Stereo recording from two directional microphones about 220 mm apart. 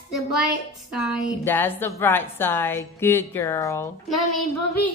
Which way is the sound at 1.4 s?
10° left (ahead or behind).